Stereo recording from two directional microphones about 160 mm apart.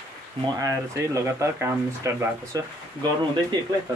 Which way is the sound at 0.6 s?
20° right (ahead or behind).